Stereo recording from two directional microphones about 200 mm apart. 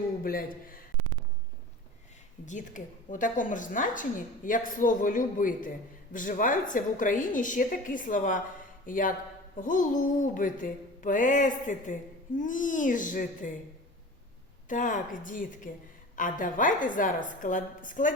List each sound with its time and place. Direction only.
0.2 s speech: 45° left (ahead or behind)
2.5 s music: 40° left (ahead or behind)
8.9 s speech: 40° left (ahead or behind)
9.6 s music: 40° left (ahead or behind)
14.7 s music: 40° left (ahead or behind)